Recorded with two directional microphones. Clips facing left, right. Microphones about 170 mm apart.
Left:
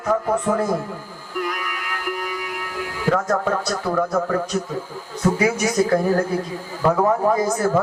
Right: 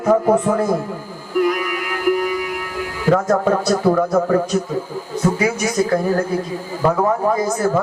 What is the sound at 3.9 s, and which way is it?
Speech, 25° right (ahead or behind).